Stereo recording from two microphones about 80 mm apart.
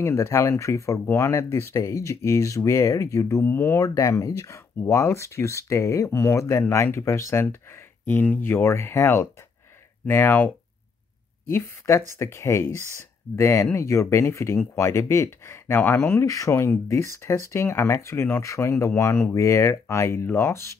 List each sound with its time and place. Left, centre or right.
0.0 s speech: left
3.5 s speech: left
3.8 s speech: left
8.1 s speech: left
16.3 s speech: left